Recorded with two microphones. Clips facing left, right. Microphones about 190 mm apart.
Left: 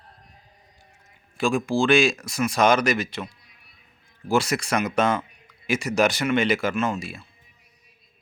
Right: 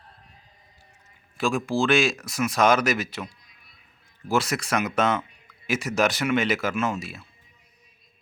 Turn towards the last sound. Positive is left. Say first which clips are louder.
# left 1 dB
turn(degrees=-5)  # may be behind; listen again after turning